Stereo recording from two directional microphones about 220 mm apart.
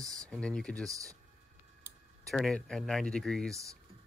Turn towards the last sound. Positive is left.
turn(degrees=0)  # may be behind; listen again after turning